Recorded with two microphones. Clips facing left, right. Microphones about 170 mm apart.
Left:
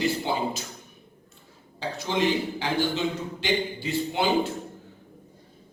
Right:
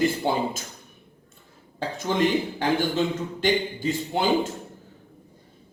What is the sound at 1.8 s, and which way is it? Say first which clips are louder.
A man's voice: right 3 dB; 50° right (ahead or behind).